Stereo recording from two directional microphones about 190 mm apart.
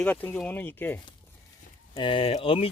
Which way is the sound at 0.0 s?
10° left (ahead or behind).